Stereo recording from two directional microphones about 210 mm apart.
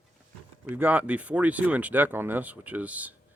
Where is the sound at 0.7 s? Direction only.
10° right (ahead or behind).